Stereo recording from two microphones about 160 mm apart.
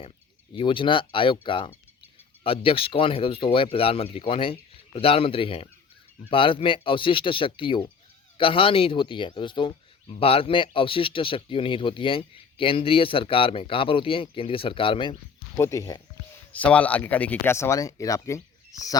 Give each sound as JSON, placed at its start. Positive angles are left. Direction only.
{"t": 0.5, "sound": "speech", "side_deg": 30}
{"t": 15.5, "sound": "speech", "side_deg": 20}
{"t": 16.5, "sound": "speech", "side_deg": 10}